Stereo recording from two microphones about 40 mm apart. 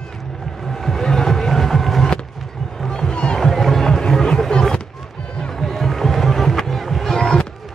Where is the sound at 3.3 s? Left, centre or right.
Centre.